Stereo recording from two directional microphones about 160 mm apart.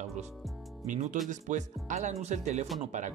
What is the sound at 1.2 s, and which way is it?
Speech, 50° right (ahead or behind).